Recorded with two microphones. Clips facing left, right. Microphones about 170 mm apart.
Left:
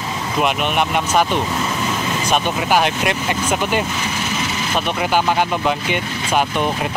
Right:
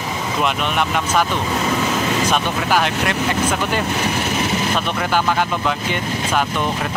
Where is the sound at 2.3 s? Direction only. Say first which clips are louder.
Left 1 dB; 15° left (ahead or behind).